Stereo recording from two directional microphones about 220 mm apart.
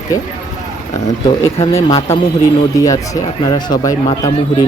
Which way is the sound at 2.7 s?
15° left (ahead or behind).